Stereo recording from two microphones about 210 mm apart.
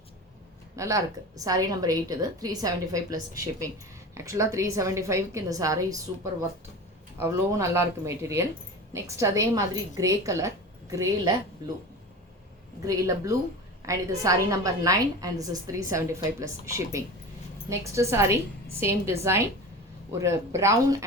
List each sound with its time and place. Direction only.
0.8 s a woman's voice: 15° right (ahead or behind)
7.2 s a woman's voice: 15° right (ahead or behind)
12.8 s a woman's voice: 15° right (ahead or behind)